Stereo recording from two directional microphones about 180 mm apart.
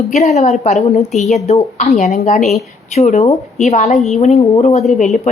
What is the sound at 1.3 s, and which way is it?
A woman's voice, 40° left (ahead or behind).